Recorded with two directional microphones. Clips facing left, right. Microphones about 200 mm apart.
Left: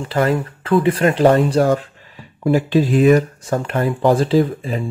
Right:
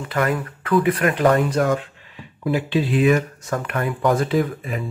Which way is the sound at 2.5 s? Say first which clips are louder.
Left 5 dB; 40° left (ahead or behind).